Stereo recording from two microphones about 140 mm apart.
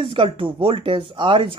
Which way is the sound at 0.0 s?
40° right (ahead or behind).